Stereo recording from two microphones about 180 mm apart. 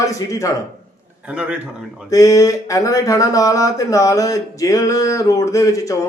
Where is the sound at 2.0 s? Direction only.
20° left (ahead or behind).